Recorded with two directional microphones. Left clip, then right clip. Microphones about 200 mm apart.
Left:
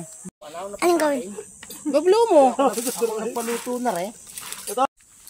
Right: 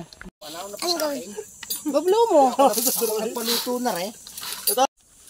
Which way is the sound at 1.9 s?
20° left (ahead or behind).